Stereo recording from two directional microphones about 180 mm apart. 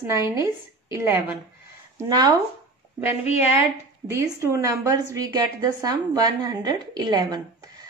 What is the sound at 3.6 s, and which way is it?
A woman's voice, 15° right (ahead or behind).